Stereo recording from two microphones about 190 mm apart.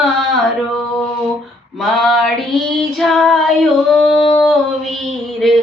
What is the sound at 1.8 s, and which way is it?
Female singing, centre (ahead or behind).